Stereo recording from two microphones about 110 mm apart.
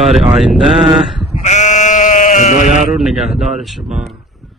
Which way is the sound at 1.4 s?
90° left.